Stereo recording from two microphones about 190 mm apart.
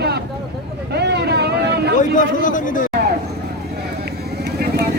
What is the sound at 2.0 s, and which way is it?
Speech, 45° left (ahead or behind).